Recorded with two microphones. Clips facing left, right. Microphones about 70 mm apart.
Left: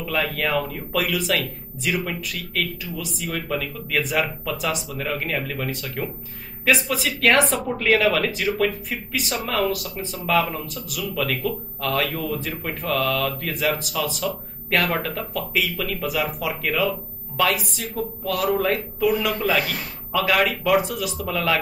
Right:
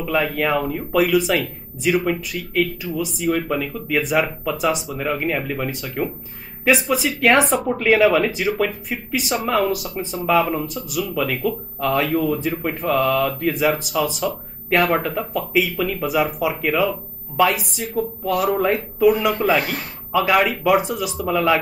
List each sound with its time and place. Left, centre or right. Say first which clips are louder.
0.0 s speech: right 4 dB; centre
11.1 s speech: right 2 dB; centre
11.8 s speech: right 6 dB; centre